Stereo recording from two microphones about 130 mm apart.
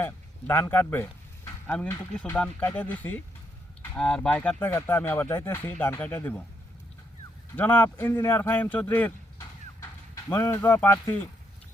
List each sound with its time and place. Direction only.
0.0 s a man's voice: 15° left (ahead or behind)
7.5 s speech: 15° left (ahead or behind)
9.4 s clip-clop: 25° left (ahead or behind)